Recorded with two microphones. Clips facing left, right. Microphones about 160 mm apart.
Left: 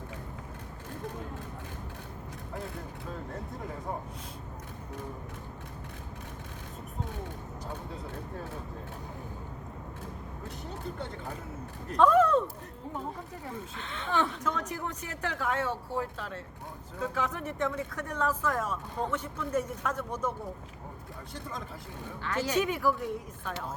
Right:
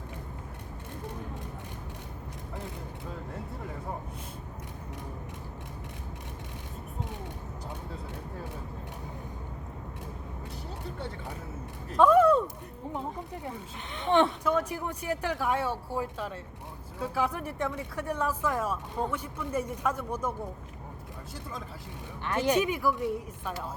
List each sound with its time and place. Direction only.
11.9 s speech: 5° right (ahead or behind)
13.4 s speech: 15° right (ahead or behind)
22.2 s speech: 15° right (ahead or behind)